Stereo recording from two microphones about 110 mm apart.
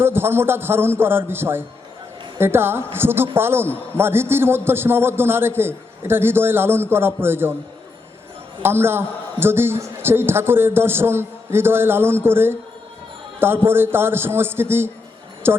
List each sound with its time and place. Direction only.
0.0 s a man's voice: 20° right (ahead or behind)
8.6 s a man's voice: 20° right (ahead or behind)